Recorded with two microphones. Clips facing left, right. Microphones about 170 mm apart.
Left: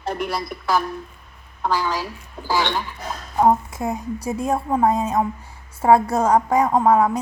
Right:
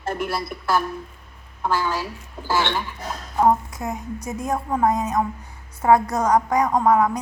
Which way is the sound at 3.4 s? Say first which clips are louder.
Left 1 dB; 25° left (ahead or behind).